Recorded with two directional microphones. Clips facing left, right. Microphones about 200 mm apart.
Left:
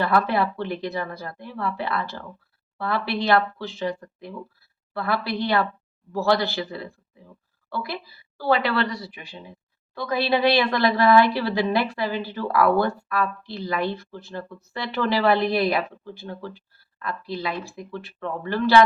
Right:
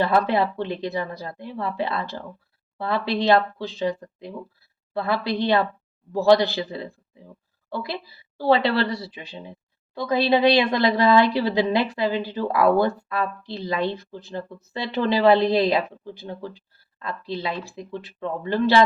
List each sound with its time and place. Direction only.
0.0 s speech: 20° right (ahead or behind)